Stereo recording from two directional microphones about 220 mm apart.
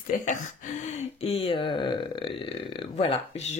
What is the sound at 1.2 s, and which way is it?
Speech, 25° left (ahead or behind).